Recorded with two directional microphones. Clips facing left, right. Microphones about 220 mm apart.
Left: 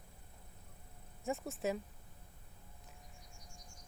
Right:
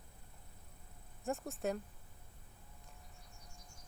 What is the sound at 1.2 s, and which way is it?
Speech, centre (ahead or behind).